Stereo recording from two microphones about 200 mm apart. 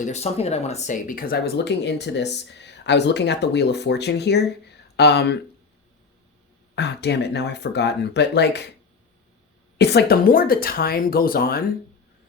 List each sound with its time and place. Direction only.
0.0 s speech: 35° left (ahead or behind); by 5.4 s 55° left (ahead or behind)
6.7 s speech: 55° left (ahead or behind)
9.7 s speech: 55° left (ahead or behind)